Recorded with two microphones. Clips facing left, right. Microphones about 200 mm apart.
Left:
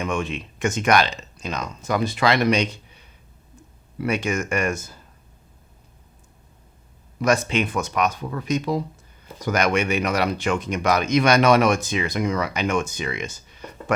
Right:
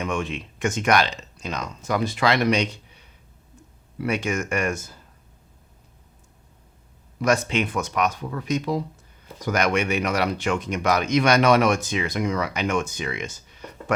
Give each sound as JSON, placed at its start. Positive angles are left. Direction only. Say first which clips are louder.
{"t": 0.0, "sound": "speech", "louder": "left 1 dB", "side_deg": 10}
{"t": 4.0, "sound": "speech", "louder": "left 1 dB", "side_deg": 10}
{"t": 7.3, "sound": "speech", "louder": "left 1 dB", "side_deg": 10}
{"t": 8.1, "sound": "speech", "louder": "left 1 dB", "side_deg": 20}
{"t": 9.5, "sound": "speech", "louder": "left 1 dB", "side_deg": 10}